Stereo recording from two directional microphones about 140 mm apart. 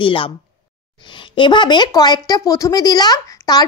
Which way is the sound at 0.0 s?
40° left (ahead or behind).